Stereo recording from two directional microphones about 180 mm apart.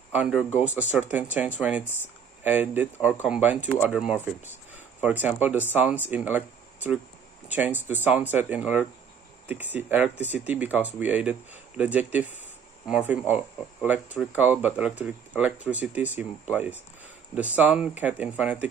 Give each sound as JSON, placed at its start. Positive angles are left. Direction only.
{"t": 0.1, "sound": "speech", "side_deg": -5}